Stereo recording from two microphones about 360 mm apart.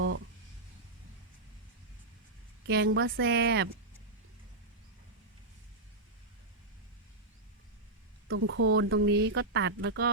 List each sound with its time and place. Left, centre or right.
2.6 s a woman's voice: right
8.3 s speech: right